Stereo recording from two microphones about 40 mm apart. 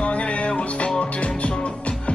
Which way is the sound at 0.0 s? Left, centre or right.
Left.